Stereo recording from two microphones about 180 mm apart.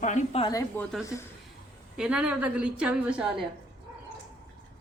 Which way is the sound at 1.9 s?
5° right (ahead or behind).